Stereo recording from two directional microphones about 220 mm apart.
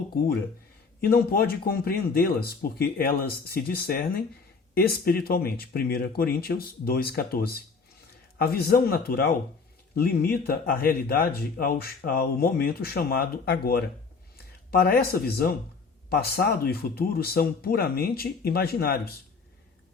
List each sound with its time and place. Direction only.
1.0 s speech: 45° left (ahead or behind)